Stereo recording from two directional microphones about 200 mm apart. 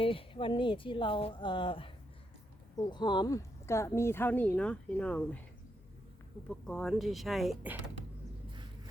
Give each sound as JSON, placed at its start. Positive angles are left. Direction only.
{"t": 0.0, "sound": "speech", "side_deg": 25}
{"t": 6.5, "sound": "speech", "side_deg": 5}